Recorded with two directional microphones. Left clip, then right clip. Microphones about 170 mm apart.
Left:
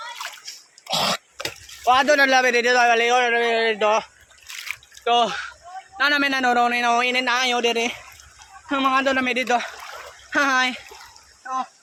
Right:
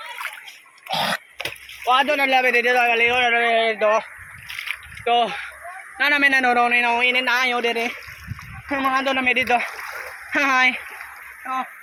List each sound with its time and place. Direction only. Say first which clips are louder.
0.9 s speech: even; 30° left (ahead or behind)
4.7 s a sound: even; 25° left (ahead or behind)
6.0 s a man's voice: right 3 dB; 15° left (ahead or behind)